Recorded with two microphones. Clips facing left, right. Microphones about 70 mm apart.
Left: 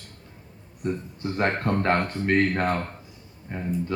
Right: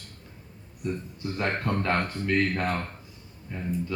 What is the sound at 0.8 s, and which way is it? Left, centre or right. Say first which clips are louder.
Speech: left 3 dB; left.